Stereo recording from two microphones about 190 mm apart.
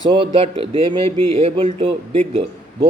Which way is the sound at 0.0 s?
25° right (ahead or behind).